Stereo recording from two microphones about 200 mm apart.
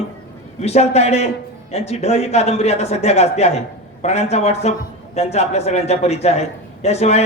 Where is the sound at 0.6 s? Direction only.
35° left (ahead or behind).